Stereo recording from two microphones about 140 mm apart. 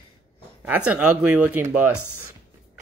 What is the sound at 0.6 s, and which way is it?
Speech, 10° right (ahead or behind).